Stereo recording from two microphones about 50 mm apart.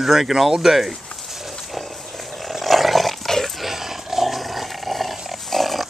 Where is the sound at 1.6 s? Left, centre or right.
Centre.